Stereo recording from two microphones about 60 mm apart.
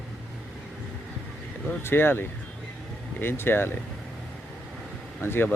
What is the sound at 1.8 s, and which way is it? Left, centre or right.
Speech, left.